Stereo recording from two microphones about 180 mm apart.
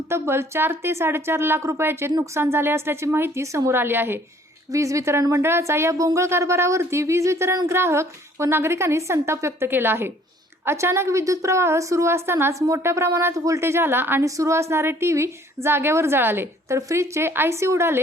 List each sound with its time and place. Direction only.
0.1 s a woman's voice: 15° right (ahead or behind)